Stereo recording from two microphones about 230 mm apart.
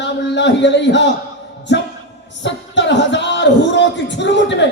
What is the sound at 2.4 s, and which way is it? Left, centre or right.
Speech, left.